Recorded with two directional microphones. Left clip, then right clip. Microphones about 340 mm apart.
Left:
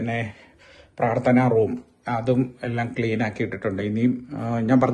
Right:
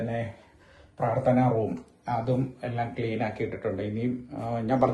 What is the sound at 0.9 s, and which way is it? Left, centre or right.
Speech, left.